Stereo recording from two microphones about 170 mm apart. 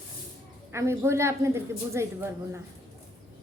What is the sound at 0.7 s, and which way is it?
A woman's voice, 15° right (ahead or behind).